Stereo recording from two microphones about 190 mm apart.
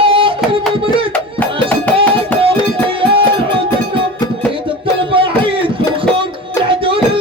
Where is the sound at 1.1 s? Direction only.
10° left (ahead or behind).